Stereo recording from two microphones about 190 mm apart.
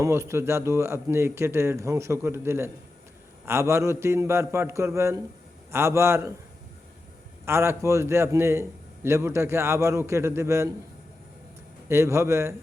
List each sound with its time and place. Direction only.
0.0 s a man's voice: 15° right (ahead or behind)
7.4 s a man's voice: 15° right (ahead or behind)
11.9 s a man's voice: 15° right (ahead or behind)